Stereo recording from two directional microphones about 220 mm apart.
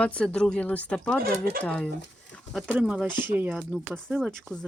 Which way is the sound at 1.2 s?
45° right (ahead or behind).